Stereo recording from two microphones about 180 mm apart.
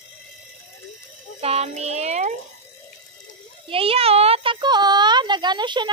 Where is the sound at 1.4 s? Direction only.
35° right (ahead or behind).